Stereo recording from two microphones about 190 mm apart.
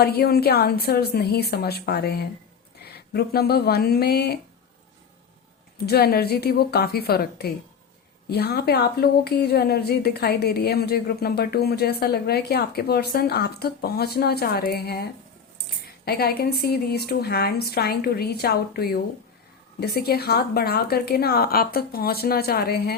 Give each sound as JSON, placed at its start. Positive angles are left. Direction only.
{"t": 0.0, "sound": "speech", "side_deg": 55}
{"t": 5.7, "sound": "speech", "side_deg": 55}
{"t": 16.0, "sound": "speech", "side_deg": 55}